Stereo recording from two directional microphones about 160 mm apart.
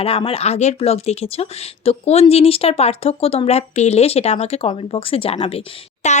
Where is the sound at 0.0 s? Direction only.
35° left (ahead or behind).